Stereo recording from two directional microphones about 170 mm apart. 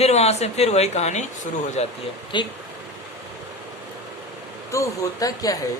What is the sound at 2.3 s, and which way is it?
Speech, 30° left (ahead or behind).